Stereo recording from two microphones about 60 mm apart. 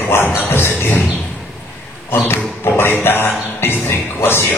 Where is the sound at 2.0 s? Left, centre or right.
Left.